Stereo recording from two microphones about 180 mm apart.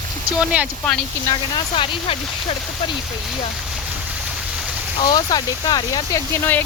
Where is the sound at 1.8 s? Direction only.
30° left (ahead or behind).